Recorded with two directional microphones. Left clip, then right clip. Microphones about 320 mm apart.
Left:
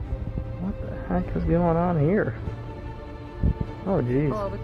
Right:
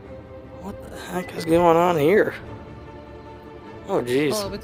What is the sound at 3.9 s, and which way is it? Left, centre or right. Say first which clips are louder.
Speech: right 4 dB; right.